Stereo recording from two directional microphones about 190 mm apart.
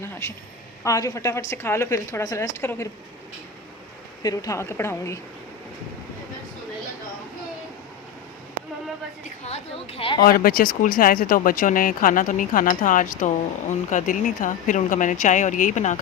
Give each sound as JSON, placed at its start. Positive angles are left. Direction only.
{"t": 0.0, "sound": "a woman's voice", "side_deg": 15}
{"t": 4.2, "sound": "a woman's voice", "side_deg": 20}
{"t": 9.2, "sound": "a woman's voice", "side_deg": 35}
{"t": 10.2, "sound": "speech", "side_deg": 50}